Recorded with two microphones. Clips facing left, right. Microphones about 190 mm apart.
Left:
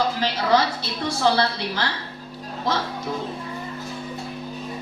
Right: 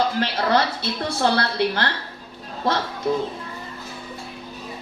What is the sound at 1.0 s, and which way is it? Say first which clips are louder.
Speech: left 1 dB; 60° right (ahead or behind).